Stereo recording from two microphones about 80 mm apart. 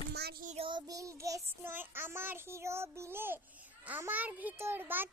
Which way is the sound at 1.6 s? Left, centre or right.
Right.